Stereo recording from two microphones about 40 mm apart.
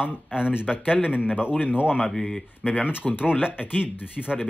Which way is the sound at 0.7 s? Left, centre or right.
Centre.